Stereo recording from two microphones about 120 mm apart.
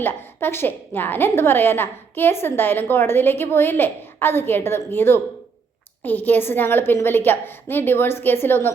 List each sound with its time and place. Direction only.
0.0 s a woman's voice: 20° left (ahead or behind)